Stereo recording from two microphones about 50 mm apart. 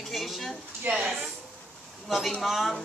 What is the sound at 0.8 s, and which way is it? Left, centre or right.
Speech, right.